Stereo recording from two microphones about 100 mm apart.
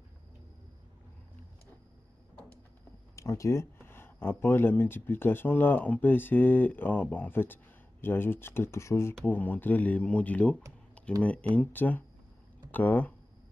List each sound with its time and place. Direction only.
3.2 s speech: 30° left (ahead or behind)
9.2 s speech: 15° left (ahead or behind)